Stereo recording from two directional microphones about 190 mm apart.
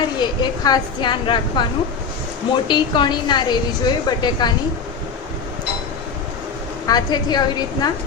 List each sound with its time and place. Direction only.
0.2 s a woman's voice: 20° left (ahead or behind)
2.6 s a woman's voice: 25° left (ahead or behind)
6.8 s a woman's voice: 20° left (ahead or behind)